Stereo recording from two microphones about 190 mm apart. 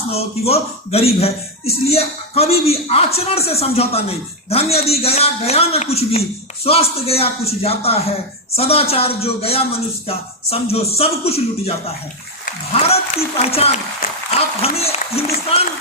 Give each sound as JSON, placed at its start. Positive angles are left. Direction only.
{"t": 0.1, "sound": "speech", "side_deg": 30}
{"t": 12.8, "sound": "speech", "side_deg": 30}